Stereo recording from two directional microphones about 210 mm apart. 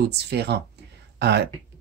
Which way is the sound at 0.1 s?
50° right (ahead or behind).